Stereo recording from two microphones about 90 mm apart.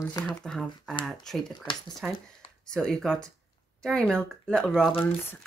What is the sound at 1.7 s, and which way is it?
Speech, 70° left (ahead or behind).